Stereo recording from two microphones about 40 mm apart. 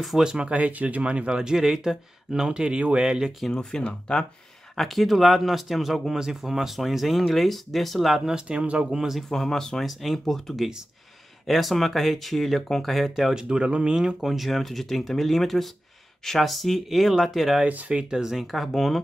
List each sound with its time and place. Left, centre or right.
0.2 s speech: centre
0.6 s speech: right; by 3.3 s centre
3.8 s speech: left
4.7 s speech: centre
8.3 s speech: right
8.9 s speech: centre
9.3 s speech: centre
13.3 s speech: right
14.3 s speech: centre
17.6 s speech: right
18.1 s speech: centre
18.4 s speech: centre